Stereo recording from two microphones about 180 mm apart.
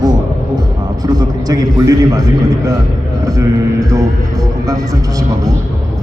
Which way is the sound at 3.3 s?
20° right (ahead or behind).